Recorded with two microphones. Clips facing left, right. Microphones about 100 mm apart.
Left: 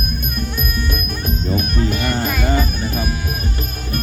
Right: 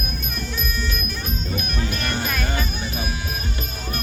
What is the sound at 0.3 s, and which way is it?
Music, 55° left (ahead or behind).